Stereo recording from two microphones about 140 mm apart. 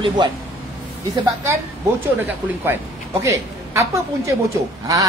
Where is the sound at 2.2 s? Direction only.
15° right (ahead or behind).